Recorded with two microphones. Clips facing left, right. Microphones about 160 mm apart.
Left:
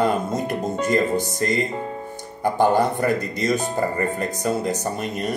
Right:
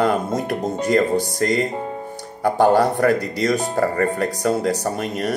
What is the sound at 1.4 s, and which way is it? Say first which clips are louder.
Speech: right 3 dB; 65° right (ahead or behind).